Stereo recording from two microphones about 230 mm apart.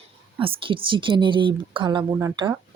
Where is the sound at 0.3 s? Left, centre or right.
Right.